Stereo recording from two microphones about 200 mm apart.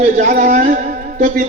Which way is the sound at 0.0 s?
40° right (ahead or behind).